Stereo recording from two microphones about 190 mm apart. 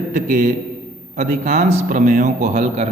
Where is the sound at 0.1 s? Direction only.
40° right (ahead or behind).